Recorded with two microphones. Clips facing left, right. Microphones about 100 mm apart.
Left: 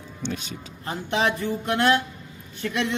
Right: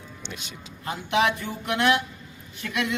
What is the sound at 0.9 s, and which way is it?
A man's voice, 35° left (ahead or behind).